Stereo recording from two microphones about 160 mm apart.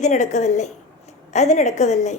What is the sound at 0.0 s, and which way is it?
Speech, 50° left (ahead or behind).